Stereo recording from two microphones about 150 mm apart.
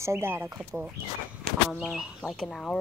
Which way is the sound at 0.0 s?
15° right (ahead or behind).